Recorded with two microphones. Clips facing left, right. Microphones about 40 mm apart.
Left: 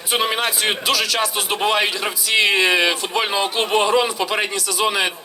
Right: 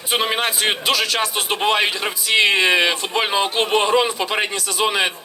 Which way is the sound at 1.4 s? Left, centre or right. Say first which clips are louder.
Right 1 dB; centre.